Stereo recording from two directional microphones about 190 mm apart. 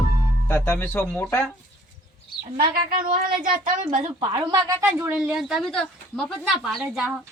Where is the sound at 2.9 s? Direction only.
50° right (ahead or behind).